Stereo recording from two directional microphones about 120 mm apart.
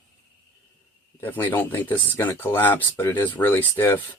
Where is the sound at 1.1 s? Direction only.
15° left (ahead or behind).